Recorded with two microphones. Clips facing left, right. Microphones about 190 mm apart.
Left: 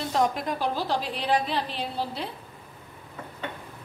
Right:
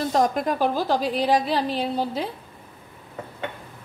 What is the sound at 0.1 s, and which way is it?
A woman's voice, 45° right (ahead or behind).